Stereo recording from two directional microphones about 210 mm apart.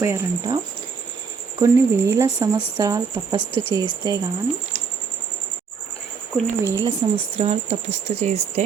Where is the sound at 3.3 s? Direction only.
25° left (ahead or behind).